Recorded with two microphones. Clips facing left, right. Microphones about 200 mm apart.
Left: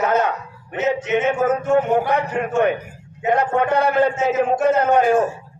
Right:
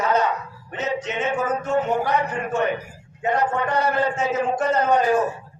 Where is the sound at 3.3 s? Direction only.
60° left (ahead or behind).